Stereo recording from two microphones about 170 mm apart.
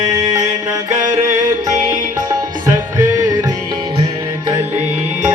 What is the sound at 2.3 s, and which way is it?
Music, 20° right (ahead or behind).